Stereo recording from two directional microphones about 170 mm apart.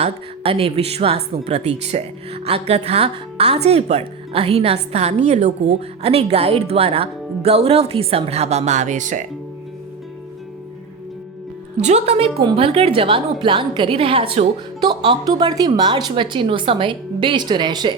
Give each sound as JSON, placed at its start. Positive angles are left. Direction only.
{"t": 0.0, "sound": "speech", "side_deg": -35}
{"t": 11.8, "sound": "a woman's voice", "side_deg": -40}